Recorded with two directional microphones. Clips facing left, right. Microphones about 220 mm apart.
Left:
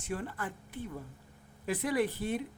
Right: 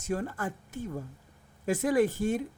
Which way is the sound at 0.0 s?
45° right (ahead or behind).